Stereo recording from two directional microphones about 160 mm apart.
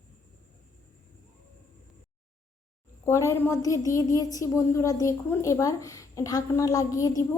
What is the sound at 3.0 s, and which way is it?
A woman's voice, 15° left (ahead or behind).